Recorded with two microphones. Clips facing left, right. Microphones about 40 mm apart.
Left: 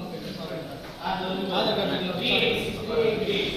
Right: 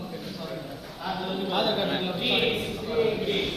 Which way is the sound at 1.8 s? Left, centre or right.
Right.